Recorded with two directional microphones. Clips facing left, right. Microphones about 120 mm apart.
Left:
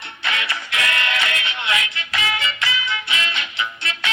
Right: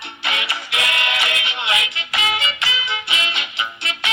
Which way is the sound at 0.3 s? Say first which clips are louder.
Even; 20° right (ahead or behind).